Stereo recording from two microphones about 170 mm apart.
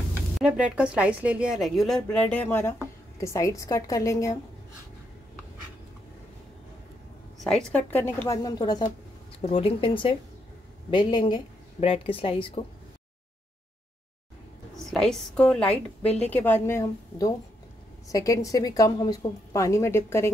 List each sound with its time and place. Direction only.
0.4 s speech: 5° right (ahead or behind)
2.1 s a woman's voice: 10° left (ahead or behind)
7.4 s a woman's voice: 5° left (ahead or behind); by 12.6 s 30° left (ahead or behind)
14.9 s a woman's voice: 5° left (ahead or behind)